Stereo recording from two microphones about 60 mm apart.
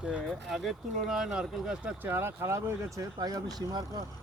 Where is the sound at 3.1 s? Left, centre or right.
Right.